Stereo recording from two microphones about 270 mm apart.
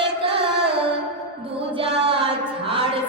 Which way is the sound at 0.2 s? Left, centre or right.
Centre.